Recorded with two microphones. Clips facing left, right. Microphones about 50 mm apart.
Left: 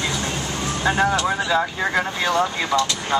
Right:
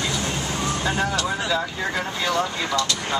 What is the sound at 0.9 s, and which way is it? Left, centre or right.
Speech, left.